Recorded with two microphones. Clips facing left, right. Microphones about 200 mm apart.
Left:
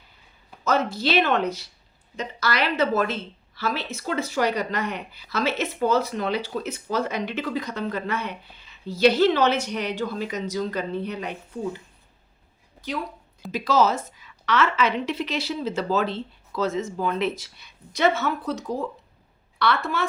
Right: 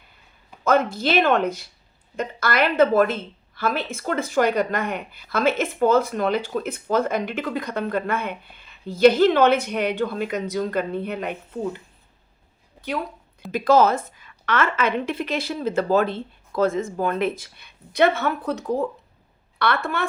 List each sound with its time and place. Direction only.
0.6 s a woman's voice: 50° right (ahead or behind)
13.5 s a woman's voice: 55° right (ahead or behind)